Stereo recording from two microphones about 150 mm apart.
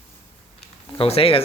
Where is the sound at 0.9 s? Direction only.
40° left (ahead or behind).